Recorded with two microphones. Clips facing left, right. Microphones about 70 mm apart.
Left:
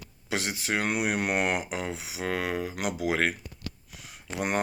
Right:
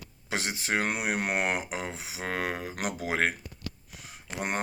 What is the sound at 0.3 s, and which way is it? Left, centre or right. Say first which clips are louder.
Speech: left 1 dB; right.